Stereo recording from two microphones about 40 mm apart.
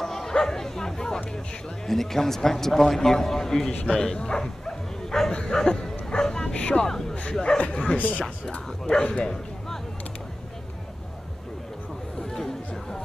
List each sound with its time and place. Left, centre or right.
0.0 s a man's voice: centre
8.0 s speech: left
8.5 s speech: left
12.2 s music: centre